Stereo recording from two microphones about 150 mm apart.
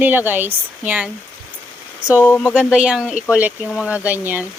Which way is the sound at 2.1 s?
15° left (ahead or behind).